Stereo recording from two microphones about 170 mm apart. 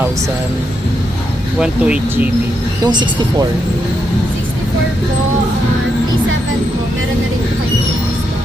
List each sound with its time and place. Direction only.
1.5 s speech: 5° right (ahead or behind)
2.8 s speech: 25° right (ahead or behind)